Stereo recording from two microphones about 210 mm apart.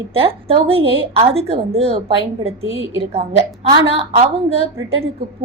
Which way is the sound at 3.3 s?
30° right (ahead or behind).